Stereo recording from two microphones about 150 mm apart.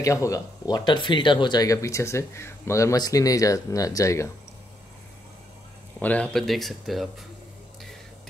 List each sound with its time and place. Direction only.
0.0 s speech: 20° left (ahead or behind)
5.9 s speech: 10° left (ahead or behind)